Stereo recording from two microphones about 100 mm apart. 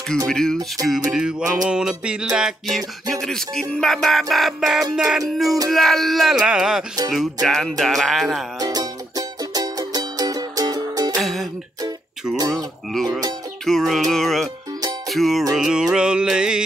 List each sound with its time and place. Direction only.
0.3 s music: 5° left (ahead or behind)
0.8 s music: 5° right (ahead or behind)
8.5 s music: 40° right (ahead or behind)
11.1 s music: centre (ahead or behind)
12.4 s music: centre (ahead or behind)